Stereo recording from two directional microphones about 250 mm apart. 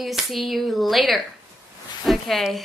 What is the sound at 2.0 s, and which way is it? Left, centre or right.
Speech, centre.